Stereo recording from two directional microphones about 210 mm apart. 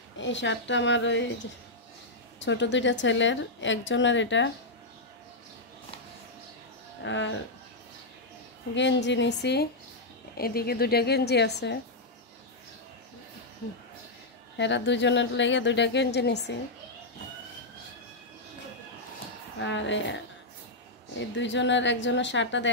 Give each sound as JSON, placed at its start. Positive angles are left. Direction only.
{"t": 0.2, "sound": "a woman's voice", "side_deg": 60}
{"t": 2.4, "sound": "a woman's voice", "side_deg": 60}
{"t": 7.0, "sound": "speech", "side_deg": 60}
{"t": 8.7, "sound": "a woman's voice", "side_deg": 55}
{"t": 14.6, "sound": "a woman's voice", "side_deg": 55}
{"t": 19.6, "sound": "a woman's voice", "side_deg": 60}
{"t": 21.4, "sound": "a woman's voice", "side_deg": 60}